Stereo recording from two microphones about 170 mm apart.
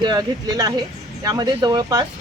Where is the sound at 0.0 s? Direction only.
25° right (ahead or behind).